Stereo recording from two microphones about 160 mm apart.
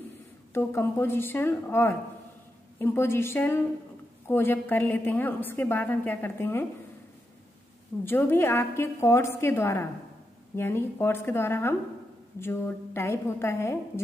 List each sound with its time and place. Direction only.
0.5 s a woman's voice: 15° left (ahead or behind)
8.0 s a woman's voice: 15° left (ahead or behind)